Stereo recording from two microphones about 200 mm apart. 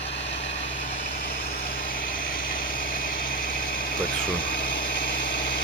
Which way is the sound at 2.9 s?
45° left (ahead or behind).